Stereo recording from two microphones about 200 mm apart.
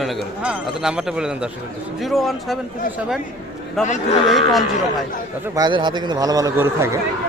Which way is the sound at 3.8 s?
35° left (ahead or behind).